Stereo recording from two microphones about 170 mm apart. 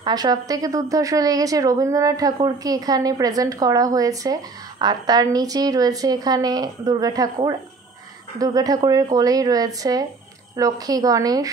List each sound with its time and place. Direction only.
0.0 s a woman's voice: 20° right (ahead or behind)